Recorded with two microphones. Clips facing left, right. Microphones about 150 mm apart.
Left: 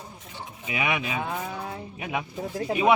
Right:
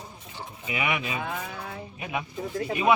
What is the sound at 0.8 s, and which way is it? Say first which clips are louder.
Speech: left 1 dB; 20° left (ahead or behind).